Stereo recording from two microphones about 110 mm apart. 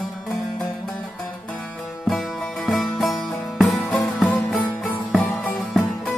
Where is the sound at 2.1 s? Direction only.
Centre (ahead or behind).